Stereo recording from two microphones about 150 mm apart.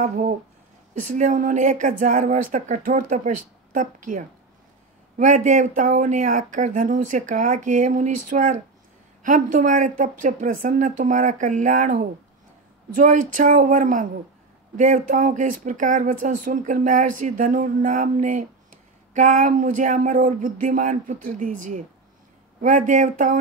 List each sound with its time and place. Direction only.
0.0 s speech: 55° right (ahead or behind)